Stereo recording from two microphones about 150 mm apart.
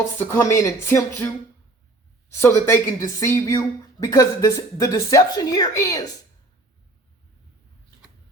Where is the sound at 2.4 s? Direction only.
20° left (ahead or behind).